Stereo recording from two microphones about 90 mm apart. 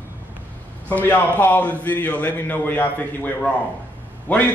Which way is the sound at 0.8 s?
20° left (ahead or behind).